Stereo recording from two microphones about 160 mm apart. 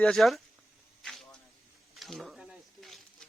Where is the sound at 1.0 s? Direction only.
Centre (ahead or behind).